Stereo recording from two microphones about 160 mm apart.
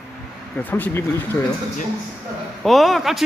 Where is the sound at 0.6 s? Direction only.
10° left (ahead or behind).